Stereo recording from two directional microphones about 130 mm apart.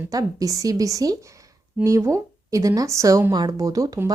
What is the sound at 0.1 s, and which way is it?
Speech, 25° right (ahead or behind).